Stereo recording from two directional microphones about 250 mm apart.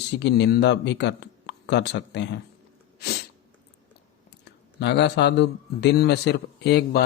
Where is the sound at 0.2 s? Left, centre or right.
Left.